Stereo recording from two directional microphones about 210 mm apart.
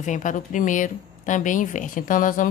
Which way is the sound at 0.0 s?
35° left (ahead or behind).